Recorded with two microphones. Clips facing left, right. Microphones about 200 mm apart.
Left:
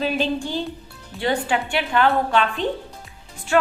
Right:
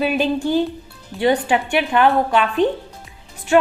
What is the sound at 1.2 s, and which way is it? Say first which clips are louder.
A woman's voice: right 5 dB; 20° right (ahead or behind).